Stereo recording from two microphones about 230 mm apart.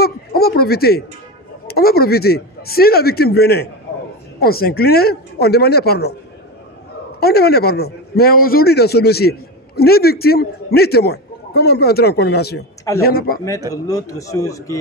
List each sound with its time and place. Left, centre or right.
0.0 s a sound: left
1.7 s a man's voice: left
7.2 s a man's voice: left
13.8 s speech: centre